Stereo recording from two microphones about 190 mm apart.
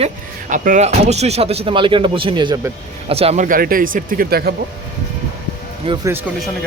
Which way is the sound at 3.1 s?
30° right (ahead or behind).